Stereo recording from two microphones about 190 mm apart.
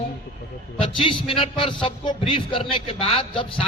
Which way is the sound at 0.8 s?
25° left (ahead or behind).